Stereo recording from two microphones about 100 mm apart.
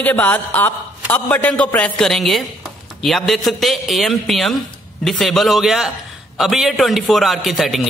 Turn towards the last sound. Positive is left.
turn(degrees=0)  # may be behind; listen again after turning